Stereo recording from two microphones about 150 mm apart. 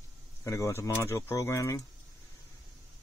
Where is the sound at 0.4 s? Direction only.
20° left (ahead or behind).